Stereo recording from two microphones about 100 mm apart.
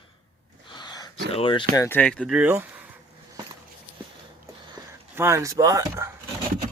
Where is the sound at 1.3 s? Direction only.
60° left (ahead or behind).